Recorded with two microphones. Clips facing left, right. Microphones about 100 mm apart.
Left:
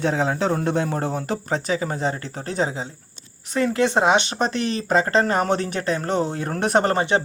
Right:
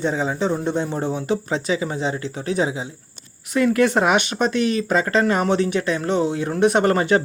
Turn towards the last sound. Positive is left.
turn(degrees=25)  # may be behind; listen again after turning